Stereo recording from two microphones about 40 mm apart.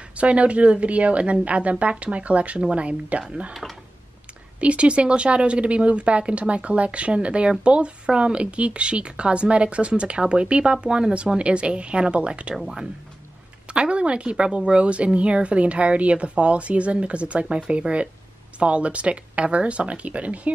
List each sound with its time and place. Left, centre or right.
0.2 s a woman's voice: right
4.6 s a woman's voice: right
12.5 s speech: centre
13.7 s a woman's voice: right